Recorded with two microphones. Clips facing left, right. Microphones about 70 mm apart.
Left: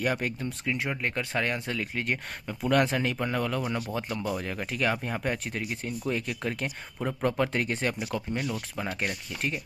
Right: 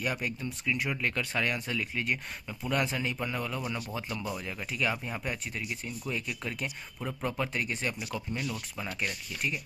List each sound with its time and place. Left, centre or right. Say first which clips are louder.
0.0 s speech: left 4 dB; left
2.7 s speech: left 6 dB; left
3.6 s speech: left 4 dB; left
7.2 s speech: left 6 dB; left
7.5 s speech: left 4 dB; left